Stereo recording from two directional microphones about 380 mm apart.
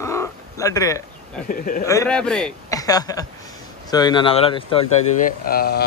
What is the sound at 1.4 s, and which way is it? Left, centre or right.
Speech, left.